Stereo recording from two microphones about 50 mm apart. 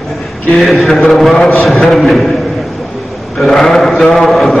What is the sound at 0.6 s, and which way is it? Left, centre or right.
A man's voice, centre.